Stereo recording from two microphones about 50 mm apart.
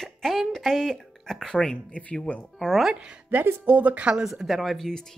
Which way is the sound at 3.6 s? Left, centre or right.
Right.